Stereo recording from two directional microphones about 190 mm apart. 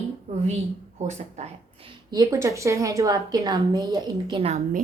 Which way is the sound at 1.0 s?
35° right (ahead or behind).